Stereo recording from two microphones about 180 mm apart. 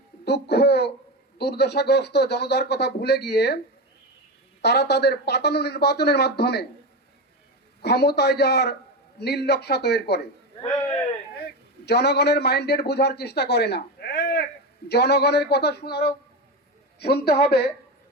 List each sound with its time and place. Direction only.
0.3 s speech: 65° left (ahead or behind)
4.6 s speech: 65° left (ahead or behind)
7.8 s speech: 65° left (ahead or behind)
11.9 s a man's voice: 65° left (ahead or behind)